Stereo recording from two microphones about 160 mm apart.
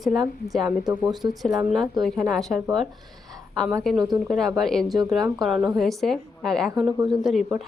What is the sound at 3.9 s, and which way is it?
A woman's voice, 5° left (ahead or behind).